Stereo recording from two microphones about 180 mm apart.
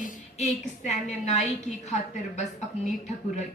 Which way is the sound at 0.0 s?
40° left (ahead or behind).